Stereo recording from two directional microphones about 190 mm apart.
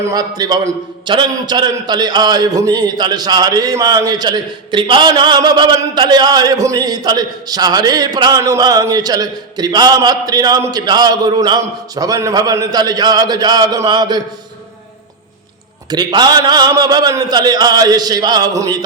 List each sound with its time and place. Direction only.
0.0 s a man's voice: 20° right (ahead or behind)
15.9 s a man's voice: 20° right (ahead or behind)